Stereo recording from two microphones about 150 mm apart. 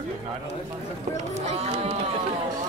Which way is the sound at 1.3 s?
45° right (ahead or behind).